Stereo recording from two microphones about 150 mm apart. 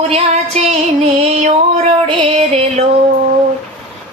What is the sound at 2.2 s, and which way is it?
Music, 40° right (ahead or behind).